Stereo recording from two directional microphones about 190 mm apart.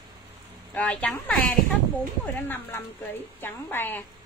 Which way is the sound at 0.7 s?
5° left (ahead or behind).